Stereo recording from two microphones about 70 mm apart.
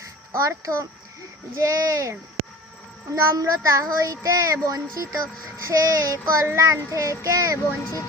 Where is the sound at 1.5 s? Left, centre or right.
Right.